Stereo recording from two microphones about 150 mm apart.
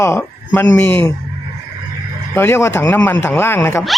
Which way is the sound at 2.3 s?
15° left (ahead or behind).